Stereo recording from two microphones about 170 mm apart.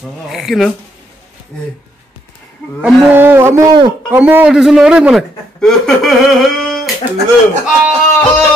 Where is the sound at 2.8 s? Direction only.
10° right (ahead or behind).